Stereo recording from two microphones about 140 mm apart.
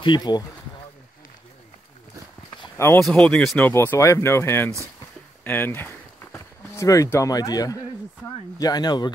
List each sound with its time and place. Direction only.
0.0 s speech: 30° left (ahead or behind)
3.0 s speech: 5° left (ahead or behind); by 9.1 s 30° left (ahead or behind)